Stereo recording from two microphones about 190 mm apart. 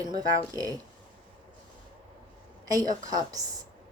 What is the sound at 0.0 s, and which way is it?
Speech, 20° right (ahead or behind).